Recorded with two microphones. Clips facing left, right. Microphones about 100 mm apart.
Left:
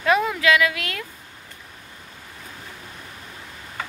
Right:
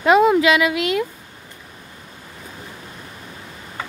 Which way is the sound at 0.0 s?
20° right (ahead or behind).